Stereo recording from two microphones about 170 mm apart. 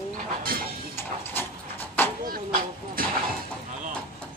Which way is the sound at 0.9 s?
15° left (ahead or behind).